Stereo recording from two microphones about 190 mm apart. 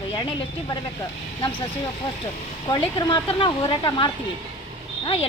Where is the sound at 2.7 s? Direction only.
25° left (ahead or behind).